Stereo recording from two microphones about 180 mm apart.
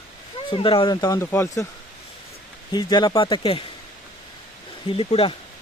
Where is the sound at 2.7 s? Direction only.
25° left (ahead or behind).